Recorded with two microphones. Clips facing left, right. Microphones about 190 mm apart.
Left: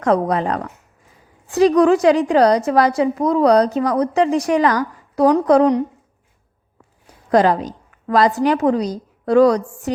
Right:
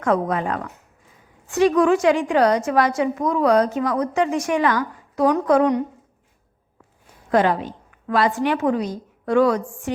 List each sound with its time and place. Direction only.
0.0 s a woman's voice: 35° left (ahead or behind)
7.3 s a woman's voice: 40° left (ahead or behind)